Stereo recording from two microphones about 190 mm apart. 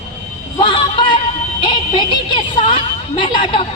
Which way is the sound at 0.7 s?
25° left (ahead or behind).